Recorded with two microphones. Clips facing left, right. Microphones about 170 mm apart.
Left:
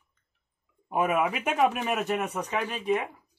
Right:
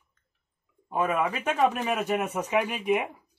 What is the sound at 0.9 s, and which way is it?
Speech, 15° left (ahead or behind).